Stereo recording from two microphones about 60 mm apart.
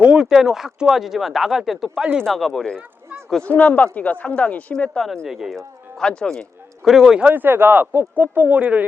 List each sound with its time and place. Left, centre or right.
0.0 s speech: centre
3.4 s speech: left
5.5 s speech: centre
6.8 s speech: centre
7.2 s speech: right